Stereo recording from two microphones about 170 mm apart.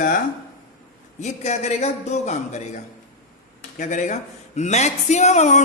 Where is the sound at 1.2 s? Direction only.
40° left (ahead or behind).